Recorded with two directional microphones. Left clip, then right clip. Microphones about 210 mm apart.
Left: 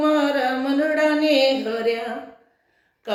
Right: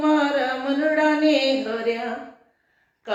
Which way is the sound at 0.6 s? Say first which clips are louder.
Right 1 dB; 50° left (ahead or behind).